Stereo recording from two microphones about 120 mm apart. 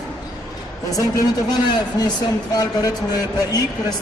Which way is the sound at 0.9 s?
30° left (ahead or behind).